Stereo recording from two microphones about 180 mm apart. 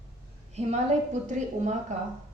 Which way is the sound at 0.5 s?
40° right (ahead or behind).